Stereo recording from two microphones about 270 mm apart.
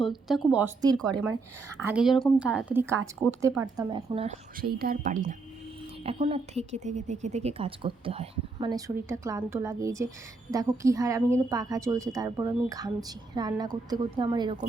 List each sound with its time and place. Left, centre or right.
0.0 s a woman's voice: centre